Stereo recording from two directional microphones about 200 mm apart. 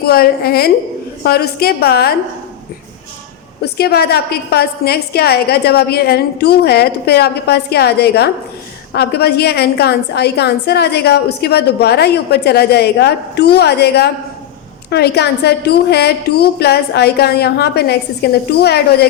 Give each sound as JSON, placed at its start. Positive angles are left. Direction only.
{"t": 0.0, "sound": "a woman's voice", "side_deg": 50}
{"t": 3.6, "sound": "a woman's voice", "side_deg": 50}